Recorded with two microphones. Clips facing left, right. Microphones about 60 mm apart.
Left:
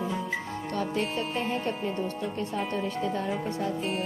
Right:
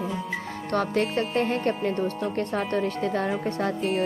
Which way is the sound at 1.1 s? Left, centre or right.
Right.